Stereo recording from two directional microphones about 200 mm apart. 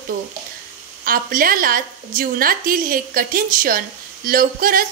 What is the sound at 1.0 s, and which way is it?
A woman's voice, 45° right (ahead or behind).